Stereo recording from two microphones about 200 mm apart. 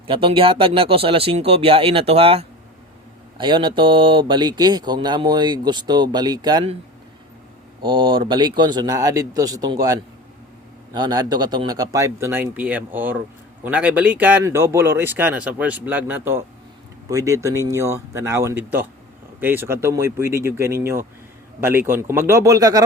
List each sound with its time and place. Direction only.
0.1 s speech: 25° right (ahead or behind)
7.8 s speech: 25° right (ahead or behind)